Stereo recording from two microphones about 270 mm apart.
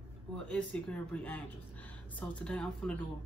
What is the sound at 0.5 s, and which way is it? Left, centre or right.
A man's voice, centre.